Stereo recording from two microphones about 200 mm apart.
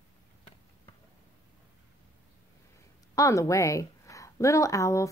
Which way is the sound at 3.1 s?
15° left (ahead or behind).